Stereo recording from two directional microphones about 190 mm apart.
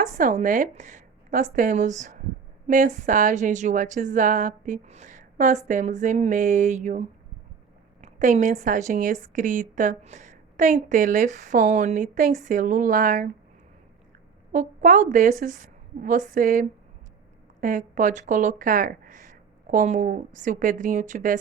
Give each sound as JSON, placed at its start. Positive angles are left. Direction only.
{"t": 0.2, "sound": "a woman's voice", "side_deg": -45}
{"t": 14.5, "sound": "a woman's voice", "side_deg": -40}